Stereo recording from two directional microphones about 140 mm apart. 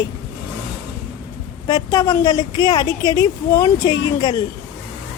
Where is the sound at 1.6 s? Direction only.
25° left (ahead or behind).